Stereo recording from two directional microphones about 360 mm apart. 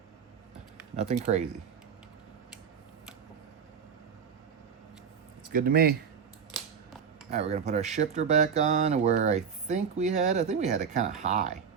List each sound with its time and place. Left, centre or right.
0.9 s speech: centre
5.5 s speech: right
7.3 s speech: centre